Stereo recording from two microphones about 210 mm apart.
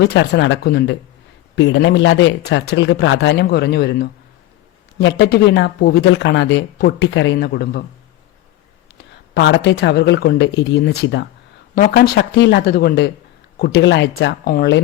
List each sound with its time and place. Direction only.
0.0 s speech: 55° left (ahead or behind)
1.5 s speech: 60° left (ahead or behind)
9.3 s speech: 50° left (ahead or behind)
14.4 s speech: 45° left (ahead or behind)